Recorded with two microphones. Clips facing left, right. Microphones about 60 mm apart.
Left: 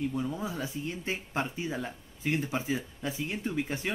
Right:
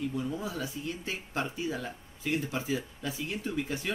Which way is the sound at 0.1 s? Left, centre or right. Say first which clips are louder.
Left 1 dB; centre.